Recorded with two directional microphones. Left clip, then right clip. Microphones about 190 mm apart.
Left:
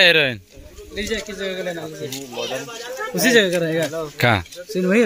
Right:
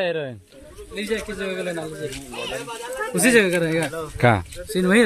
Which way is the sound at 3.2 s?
10° right (ahead or behind).